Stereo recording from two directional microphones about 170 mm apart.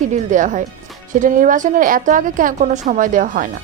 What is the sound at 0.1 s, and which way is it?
Speech, 45° right (ahead or behind).